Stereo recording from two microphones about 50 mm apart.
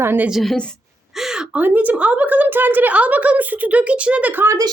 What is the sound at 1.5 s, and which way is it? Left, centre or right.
A woman's voice, right.